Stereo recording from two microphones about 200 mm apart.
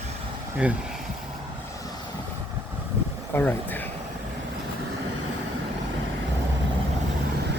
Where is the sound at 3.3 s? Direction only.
10° left (ahead or behind).